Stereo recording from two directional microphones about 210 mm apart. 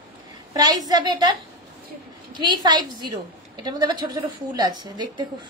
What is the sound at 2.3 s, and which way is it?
A woman's voice, 20° right (ahead or behind).